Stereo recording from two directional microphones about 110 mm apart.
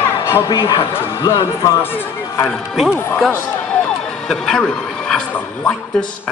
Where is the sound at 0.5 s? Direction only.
45° left (ahead or behind).